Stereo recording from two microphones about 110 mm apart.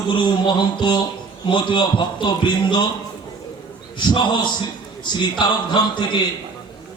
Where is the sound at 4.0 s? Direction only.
40° left (ahead or behind).